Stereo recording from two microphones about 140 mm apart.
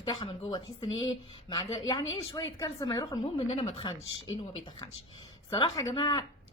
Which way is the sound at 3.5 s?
45° left (ahead or behind).